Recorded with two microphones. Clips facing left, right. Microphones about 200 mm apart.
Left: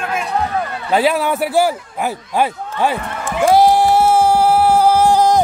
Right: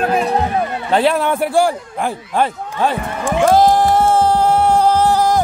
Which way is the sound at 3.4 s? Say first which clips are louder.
Left 1 dB; 10° left (ahead or behind).